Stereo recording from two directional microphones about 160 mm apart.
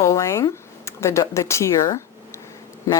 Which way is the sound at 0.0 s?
20° left (ahead or behind).